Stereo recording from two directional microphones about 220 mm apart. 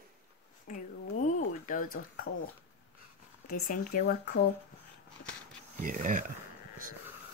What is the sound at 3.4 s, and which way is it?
Speech, 35° left (ahead or behind).